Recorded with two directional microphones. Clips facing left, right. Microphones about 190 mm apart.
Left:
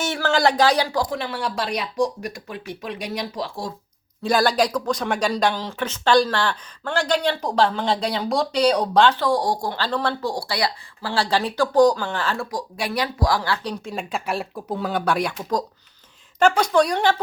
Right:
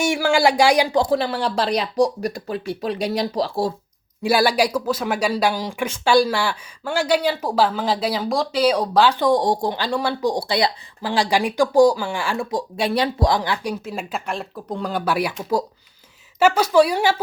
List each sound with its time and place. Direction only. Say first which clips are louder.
0.0 s speech: right 3 dB; 10° right (ahead or behind)
1.0 s speech: right 6 dB; 35° right (ahead or behind)
4.2 s speech: right 1 dB; 10° right (ahead or behind)
9.1 s speech: right 3 dB; 20° right (ahead or behind)
12.5 s speech: right 5 dB; 25° right (ahead or behind); by 15.4 s 5° right (ahead or behind)
16.4 s speech: right 2 dB; 5° right (ahead or behind)